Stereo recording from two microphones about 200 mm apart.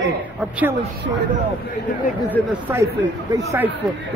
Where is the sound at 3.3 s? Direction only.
15° right (ahead or behind).